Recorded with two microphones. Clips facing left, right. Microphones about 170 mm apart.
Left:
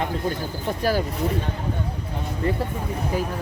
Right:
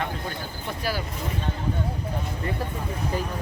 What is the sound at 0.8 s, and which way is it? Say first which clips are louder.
Speech: left 7 dB; 45° left (ahead or behind).